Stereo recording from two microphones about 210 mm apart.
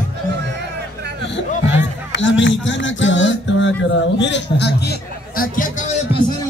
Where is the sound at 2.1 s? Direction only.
60° left (ahead or behind); by 5.8 s 40° left (ahead or behind).